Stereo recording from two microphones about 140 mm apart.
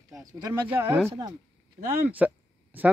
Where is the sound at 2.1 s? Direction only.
10° right (ahead or behind).